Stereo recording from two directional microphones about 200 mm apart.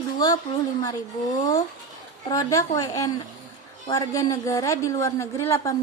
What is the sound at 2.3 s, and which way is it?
A woman's voice, 15° left (ahead or behind).